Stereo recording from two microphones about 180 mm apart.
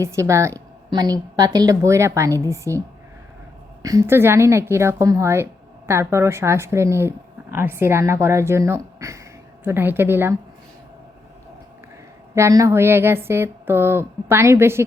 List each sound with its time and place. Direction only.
0.0 s a woman's voice: 15° right (ahead or behind)
3.8 s a woman's voice: 15° right (ahead or behind)
12.3 s a woman's voice: 15° right (ahead or behind)